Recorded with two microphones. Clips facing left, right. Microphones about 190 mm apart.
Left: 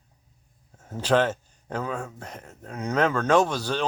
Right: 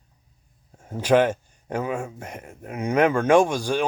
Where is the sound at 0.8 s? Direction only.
15° right (ahead or behind).